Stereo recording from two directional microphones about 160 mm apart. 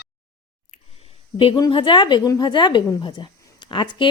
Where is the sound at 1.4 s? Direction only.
30° left (ahead or behind).